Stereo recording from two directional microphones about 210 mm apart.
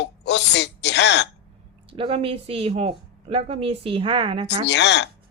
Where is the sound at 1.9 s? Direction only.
25° right (ahead or behind).